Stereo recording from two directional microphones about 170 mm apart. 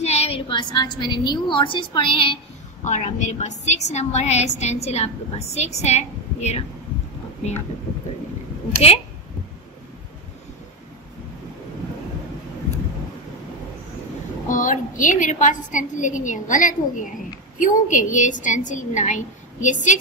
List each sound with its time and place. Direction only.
0.0 s a woman's voice: 40° left (ahead or behind)
2.8 s a woman's voice: 45° left (ahead or behind)
14.5 s a woman's voice: 50° left (ahead or behind)